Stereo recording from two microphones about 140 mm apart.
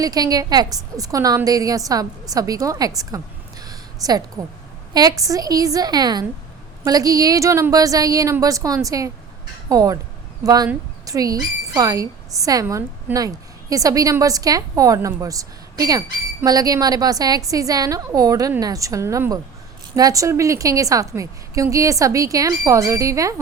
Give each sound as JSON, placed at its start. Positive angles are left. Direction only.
{"t": 0.0, "sound": "a woman's voice", "side_deg": -25}
{"t": 3.6, "sound": "a sound", "side_deg": -25}
{"t": 4.9, "sound": "a woman's voice", "side_deg": -25}